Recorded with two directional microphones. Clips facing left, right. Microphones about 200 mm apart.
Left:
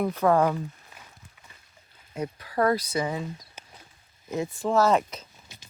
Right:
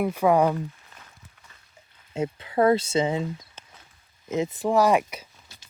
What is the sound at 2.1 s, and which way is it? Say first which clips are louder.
Speech: right 4 dB; 25° right (ahead or behind).